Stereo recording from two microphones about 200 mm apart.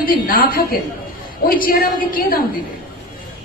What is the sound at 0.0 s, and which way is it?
Speech, 45° left (ahead or behind).